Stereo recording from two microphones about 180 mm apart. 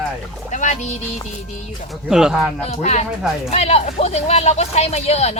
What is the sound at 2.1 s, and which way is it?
Speech, 5° right (ahead or behind).